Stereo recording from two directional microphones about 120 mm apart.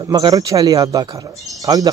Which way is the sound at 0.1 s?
35° right (ahead or behind).